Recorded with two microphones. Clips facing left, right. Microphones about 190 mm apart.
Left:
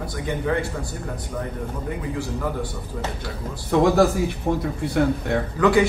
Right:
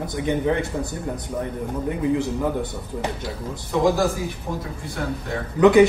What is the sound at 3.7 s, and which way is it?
Speech, 65° left (ahead or behind).